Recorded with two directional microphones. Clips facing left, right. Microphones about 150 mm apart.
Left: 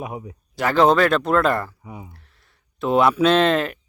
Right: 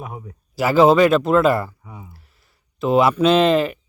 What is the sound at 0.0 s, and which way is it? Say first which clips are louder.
Speech: left 3 dB; 15° left (ahead or behind).